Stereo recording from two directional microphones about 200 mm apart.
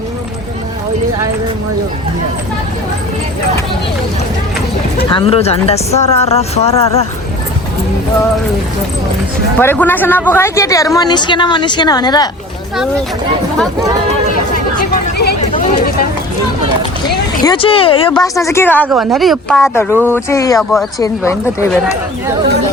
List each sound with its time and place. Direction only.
5.0 s speech: 25° left (ahead or behind)
9.6 s speech: 10° left (ahead or behind)
14.8 s a sound: 55° left (ahead or behind)
17.4 s speech: 25° left (ahead or behind)
18.2 s speech: 15° left (ahead or behind); by 19.7 s centre (ahead or behind)
19.7 s speech: 10° left (ahead or behind)
20.6 s speech: centre (ahead or behind)
21.0 s speech: 15° left (ahead or behind)